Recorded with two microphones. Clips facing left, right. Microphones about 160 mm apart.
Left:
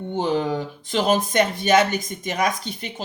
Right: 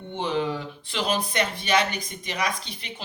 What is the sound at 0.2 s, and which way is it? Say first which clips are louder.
Speech: left 4 dB; 40° left (ahead or behind).